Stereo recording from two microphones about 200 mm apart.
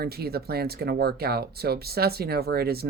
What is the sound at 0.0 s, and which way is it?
Speech, 50° right (ahead or behind).